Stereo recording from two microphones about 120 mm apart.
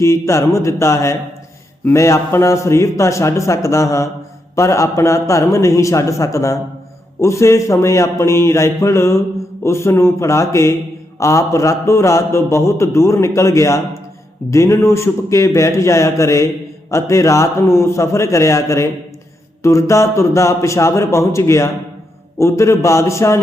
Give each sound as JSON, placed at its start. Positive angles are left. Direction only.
{"t": 0.0, "sound": "a man's voice", "side_deg": 25}